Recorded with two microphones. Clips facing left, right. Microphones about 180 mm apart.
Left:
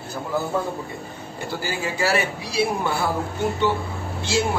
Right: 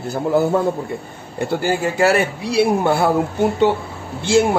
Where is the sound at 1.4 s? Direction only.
60° right (ahead or behind).